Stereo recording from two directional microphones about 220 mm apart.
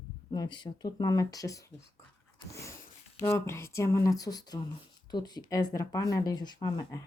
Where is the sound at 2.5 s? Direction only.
15° left (ahead or behind).